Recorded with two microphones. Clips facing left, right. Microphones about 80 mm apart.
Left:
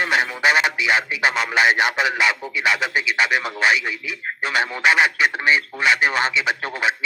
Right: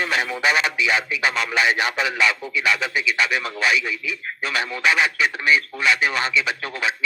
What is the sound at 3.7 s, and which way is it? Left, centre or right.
Speech, left.